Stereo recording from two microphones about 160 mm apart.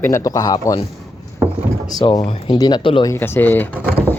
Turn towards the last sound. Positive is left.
turn(degrees=10)  # may be behind; listen again after turning